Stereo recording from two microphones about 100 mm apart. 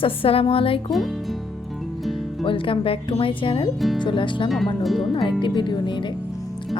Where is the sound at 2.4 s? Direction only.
60° left (ahead or behind).